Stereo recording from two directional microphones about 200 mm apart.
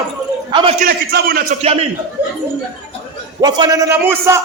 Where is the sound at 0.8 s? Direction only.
50° right (ahead or behind).